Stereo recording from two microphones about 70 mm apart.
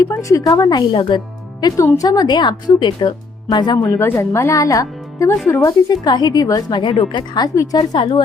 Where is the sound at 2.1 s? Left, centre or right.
Left.